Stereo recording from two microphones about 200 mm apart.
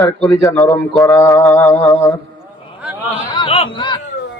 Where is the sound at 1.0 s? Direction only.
15° left (ahead or behind).